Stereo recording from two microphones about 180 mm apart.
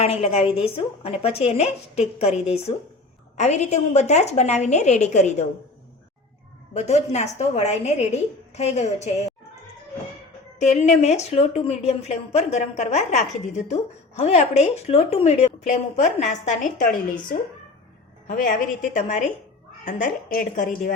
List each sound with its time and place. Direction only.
0.0 s a woman's voice: 35° left (ahead or behind)
6.7 s a woman's voice: 40° left (ahead or behind)
10.6 s a woman's voice: 40° left (ahead or behind)